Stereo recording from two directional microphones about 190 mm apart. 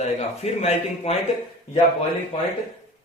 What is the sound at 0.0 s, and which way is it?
A man's voice, 35° left (ahead or behind).